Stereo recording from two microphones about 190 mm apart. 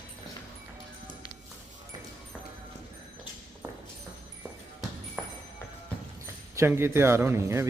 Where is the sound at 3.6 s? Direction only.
15° right (ahead or behind).